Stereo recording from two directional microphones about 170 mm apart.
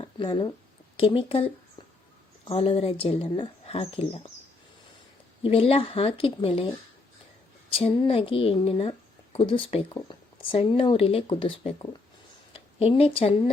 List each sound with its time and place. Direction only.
0.0 s a woman's voice: 30° left (ahead or behind)
5.4 s a woman's voice: 35° left (ahead or behind)